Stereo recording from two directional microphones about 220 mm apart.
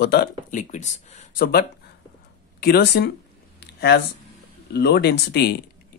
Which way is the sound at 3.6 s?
50° left (ahead or behind).